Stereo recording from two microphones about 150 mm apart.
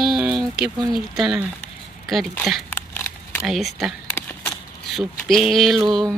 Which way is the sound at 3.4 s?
Centre (ahead or behind).